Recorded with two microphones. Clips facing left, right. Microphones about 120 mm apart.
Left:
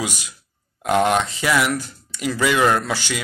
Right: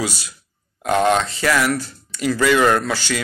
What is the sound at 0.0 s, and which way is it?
Speech, 15° left (ahead or behind).